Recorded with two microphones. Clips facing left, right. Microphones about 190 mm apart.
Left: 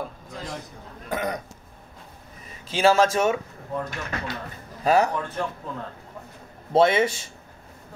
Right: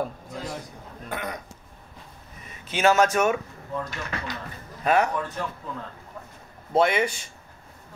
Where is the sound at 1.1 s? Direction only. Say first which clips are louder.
Left 5 dB; 40° left (ahead or behind).